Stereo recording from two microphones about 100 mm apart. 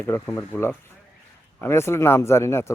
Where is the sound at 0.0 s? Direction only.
25° left (ahead or behind).